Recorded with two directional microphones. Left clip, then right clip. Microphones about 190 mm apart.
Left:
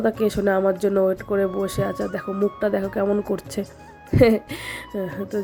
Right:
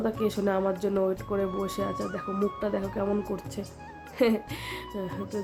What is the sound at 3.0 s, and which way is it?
Speech, 30° left (ahead or behind).